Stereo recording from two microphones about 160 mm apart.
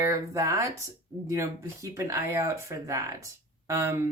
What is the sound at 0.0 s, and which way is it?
A woman's voice, 20° right (ahead or behind).